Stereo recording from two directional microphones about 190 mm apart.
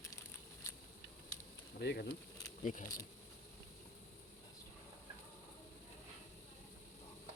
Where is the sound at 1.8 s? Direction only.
60° left (ahead or behind).